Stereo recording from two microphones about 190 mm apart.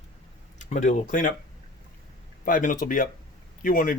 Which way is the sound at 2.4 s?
45° left (ahead or behind).